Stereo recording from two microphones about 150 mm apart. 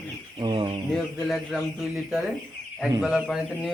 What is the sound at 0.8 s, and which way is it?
Speech, centre (ahead or behind).